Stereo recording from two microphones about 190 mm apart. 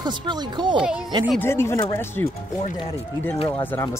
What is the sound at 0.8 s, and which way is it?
Speech, 5° right (ahead or behind).